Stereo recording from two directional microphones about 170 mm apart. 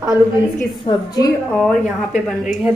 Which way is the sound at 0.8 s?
25° left (ahead or behind).